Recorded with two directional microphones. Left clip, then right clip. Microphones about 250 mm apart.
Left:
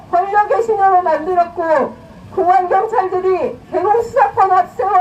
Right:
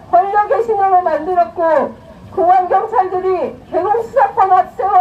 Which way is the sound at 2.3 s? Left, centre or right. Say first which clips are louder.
Right 1 dB; centre.